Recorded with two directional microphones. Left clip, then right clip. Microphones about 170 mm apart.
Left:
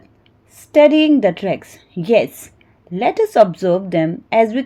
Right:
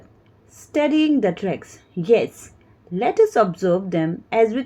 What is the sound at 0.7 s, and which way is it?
A woman's voice, 30° left (ahead or behind).